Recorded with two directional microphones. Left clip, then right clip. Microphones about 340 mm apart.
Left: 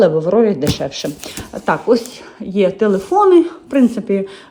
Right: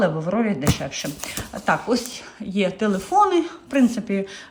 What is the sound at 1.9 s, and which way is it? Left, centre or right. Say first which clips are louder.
Speech: left 9 dB; centre.